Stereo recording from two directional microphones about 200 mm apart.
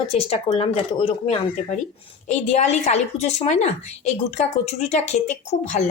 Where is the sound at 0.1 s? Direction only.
30° left (ahead or behind).